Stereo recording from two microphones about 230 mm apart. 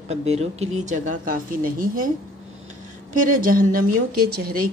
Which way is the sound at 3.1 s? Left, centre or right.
Right.